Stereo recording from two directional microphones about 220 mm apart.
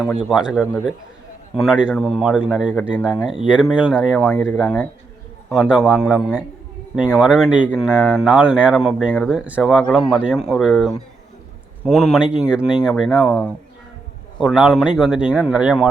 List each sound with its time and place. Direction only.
0.3 s speech: centre (ahead or behind)
4.6 s speech: 10° left (ahead or behind)
5.5 s speech: centre (ahead or behind)